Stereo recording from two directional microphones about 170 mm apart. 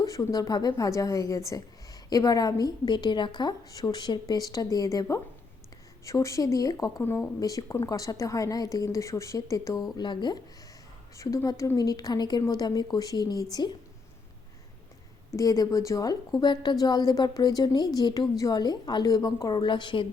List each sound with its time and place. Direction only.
0.0 s a woman's voice: 20° left (ahead or behind)
15.4 s a woman's voice: 20° left (ahead or behind)